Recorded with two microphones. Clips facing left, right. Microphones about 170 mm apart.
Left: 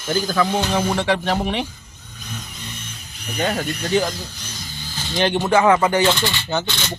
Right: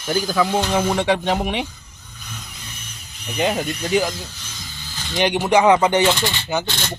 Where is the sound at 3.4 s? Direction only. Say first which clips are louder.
Right 1 dB; 15° right (ahead or behind).